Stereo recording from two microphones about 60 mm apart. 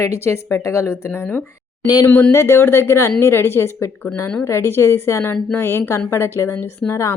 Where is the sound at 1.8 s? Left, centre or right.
Left.